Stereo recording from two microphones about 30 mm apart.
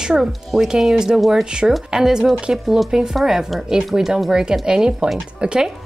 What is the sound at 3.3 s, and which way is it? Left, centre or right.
Speech, centre.